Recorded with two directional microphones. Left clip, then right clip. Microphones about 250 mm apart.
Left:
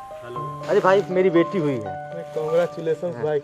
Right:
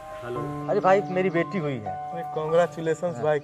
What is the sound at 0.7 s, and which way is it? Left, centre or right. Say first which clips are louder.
A man's voice: left 3 dB; centre.